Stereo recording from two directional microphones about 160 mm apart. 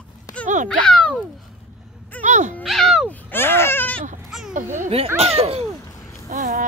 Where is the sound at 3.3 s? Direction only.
15° left (ahead or behind).